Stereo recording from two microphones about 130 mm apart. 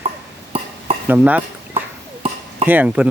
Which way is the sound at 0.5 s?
50° right (ahead or behind).